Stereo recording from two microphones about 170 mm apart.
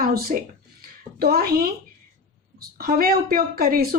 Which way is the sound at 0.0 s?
60° right (ahead or behind).